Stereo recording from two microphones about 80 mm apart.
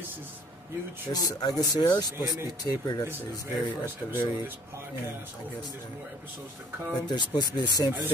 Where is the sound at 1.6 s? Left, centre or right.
Left.